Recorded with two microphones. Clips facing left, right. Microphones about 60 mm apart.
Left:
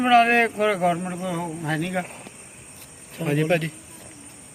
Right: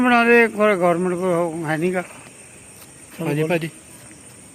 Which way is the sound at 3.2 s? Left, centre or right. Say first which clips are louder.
Right 1 dB; centre.